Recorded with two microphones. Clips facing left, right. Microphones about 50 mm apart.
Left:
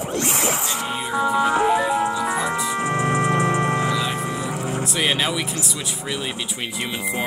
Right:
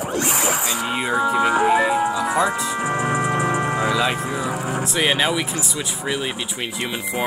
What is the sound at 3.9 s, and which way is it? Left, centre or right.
Music, right.